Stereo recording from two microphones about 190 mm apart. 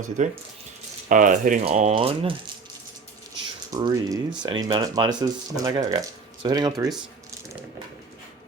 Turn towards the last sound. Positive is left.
turn(degrees=-20)  # may be behind; listen again after turning